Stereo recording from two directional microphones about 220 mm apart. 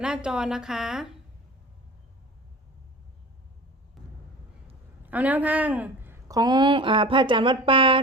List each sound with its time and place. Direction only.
0.0 s a woman's voice: 5° right (ahead or behind)
5.0 s a woman's voice: 5° right (ahead or behind); by 8.0 s 25° right (ahead or behind)